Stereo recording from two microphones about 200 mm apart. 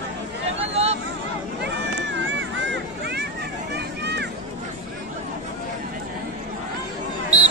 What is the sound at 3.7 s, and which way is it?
Vehicle, 55° right (ahead or behind).